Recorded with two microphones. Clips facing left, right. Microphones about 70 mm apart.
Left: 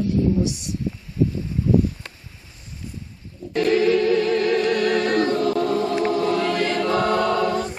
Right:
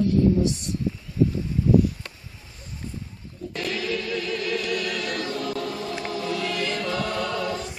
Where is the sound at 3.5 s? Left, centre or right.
Left.